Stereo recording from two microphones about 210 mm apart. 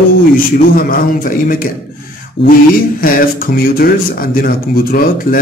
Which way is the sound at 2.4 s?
25° left (ahead or behind).